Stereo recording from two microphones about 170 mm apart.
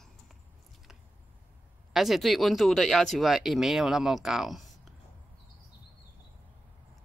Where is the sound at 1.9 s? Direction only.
Centre (ahead or behind).